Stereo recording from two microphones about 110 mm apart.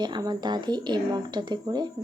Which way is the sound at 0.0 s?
40° right (ahead or behind).